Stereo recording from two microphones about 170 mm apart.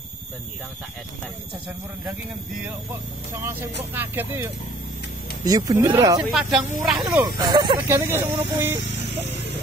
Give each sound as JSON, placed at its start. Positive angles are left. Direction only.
{"t": 3.9, "sound": "speech", "side_deg": -10}
{"t": 6.2, "sound": "speech", "side_deg": 0}
{"t": 7.0, "sound": "speech", "side_deg": -20}
{"t": 7.9, "sound": "speech", "side_deg": -15}